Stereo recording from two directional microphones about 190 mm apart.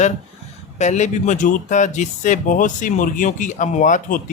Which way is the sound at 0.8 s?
40° left (ahead or behind).